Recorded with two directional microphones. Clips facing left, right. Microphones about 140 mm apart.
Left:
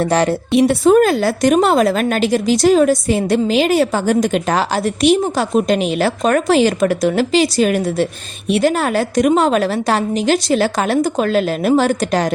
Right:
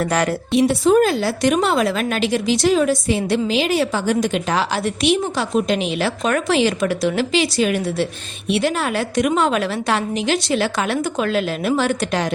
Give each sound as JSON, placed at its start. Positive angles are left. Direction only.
{"t": 0.0, "sound": "a woman's voice", "side_deg": 30}
{"t": 0.5, "sound": "a woman's voice", "side_deg": 55}